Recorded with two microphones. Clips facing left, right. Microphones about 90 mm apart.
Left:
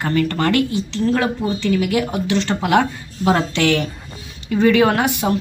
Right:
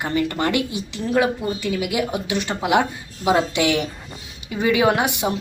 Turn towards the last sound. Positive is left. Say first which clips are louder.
# left 2 dB
turn(degrees=-20)  # may be behind; listen again after turning